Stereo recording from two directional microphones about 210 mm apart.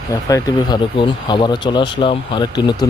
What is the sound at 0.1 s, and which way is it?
Speech, 15° left (ahead or behind).